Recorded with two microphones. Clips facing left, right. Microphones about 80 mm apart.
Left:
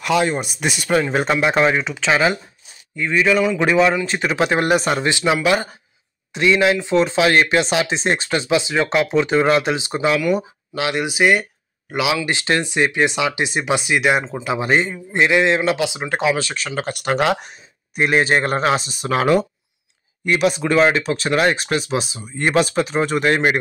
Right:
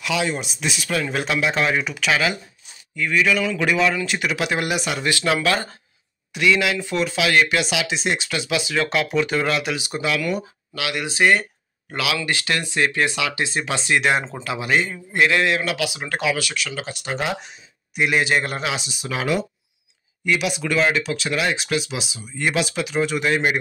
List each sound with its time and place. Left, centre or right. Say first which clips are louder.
0.0 s speech: left 5 dB; left
1.1 s speech: left 5 dB; left
1.6 s speech: left 4 dB; left
5.0 s speech: left 3 dB; left
6.3 s speech: left 4 dB; left
11.1 s speech: even; centre
14.5 s speech: left 3 dB; left
17.5 s speech: left 2 dB; left